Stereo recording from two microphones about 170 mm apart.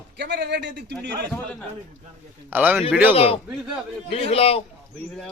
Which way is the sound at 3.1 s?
35° left (ahead or behind).